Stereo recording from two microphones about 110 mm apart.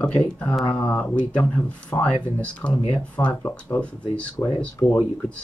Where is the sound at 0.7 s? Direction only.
10° left (ahead or behind).